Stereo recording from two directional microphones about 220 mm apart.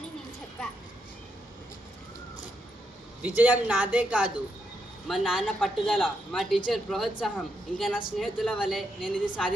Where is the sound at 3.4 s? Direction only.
5° right (ahead or behind).